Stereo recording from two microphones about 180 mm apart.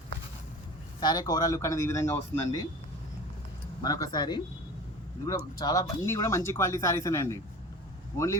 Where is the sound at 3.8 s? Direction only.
20° left (ahead or behind).